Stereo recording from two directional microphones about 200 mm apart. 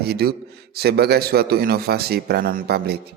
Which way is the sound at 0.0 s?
50° right (ahead or behind).